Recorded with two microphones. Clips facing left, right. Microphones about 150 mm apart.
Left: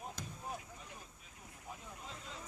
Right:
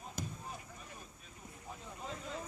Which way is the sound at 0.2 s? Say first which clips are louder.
Right 5 dB; 10° right (ahead or behind).